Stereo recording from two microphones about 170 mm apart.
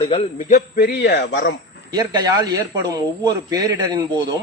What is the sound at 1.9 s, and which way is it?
A man's voice, 25° right (ahead or behind).